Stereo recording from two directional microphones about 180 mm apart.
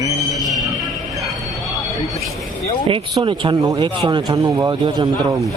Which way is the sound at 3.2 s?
25° right (ahead or behind).